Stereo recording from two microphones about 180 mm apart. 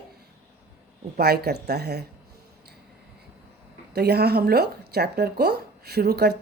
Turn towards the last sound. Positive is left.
turn(degrees=-60)  # may be behind; listen again after turning